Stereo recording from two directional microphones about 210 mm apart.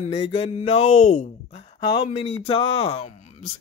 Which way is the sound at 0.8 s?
75° left (ahead or behind).